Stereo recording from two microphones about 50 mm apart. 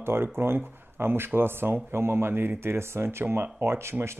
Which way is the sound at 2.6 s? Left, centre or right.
Right.